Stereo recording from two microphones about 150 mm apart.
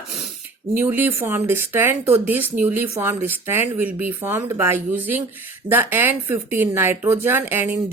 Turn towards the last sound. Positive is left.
turn(degrees=-15)  # may be behind; listen again after turning